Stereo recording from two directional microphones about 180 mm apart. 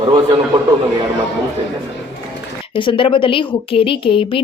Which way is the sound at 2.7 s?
30° left (ahead or behind).